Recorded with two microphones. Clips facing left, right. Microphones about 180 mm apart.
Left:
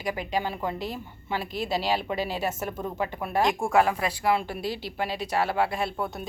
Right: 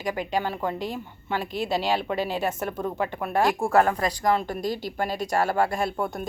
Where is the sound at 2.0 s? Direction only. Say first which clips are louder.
Right 2 dB; 45° right (ahead or behind).